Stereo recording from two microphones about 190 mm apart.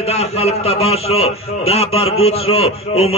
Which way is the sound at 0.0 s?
30° left (ahead or behind).